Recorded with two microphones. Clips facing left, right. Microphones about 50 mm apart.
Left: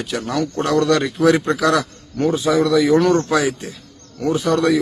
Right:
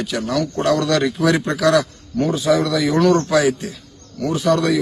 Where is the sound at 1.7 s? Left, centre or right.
Centre; by 4.4 s left.